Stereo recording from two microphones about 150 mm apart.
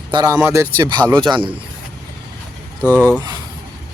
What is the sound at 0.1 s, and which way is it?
Speech, 25° right (ahead or behind).